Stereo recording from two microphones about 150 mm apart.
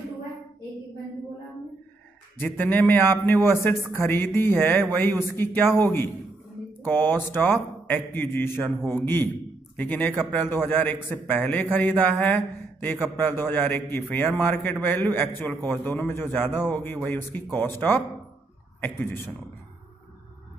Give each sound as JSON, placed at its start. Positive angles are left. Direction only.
{"t": 2.4, "sound": "a man's voice", "side_deg": 15}